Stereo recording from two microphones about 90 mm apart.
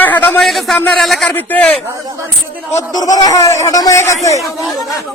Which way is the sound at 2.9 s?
45° left (ahead or behind).